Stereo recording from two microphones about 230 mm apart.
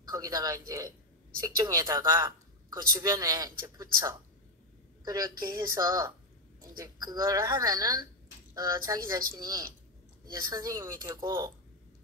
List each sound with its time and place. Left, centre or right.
0.0 s a woman's voice: centre